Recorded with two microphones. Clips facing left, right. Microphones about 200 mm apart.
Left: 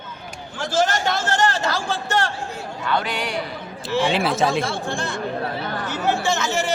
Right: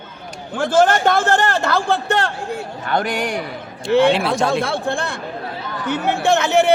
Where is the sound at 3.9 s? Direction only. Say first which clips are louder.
Right 8 dB; 60° right (ahead or behind).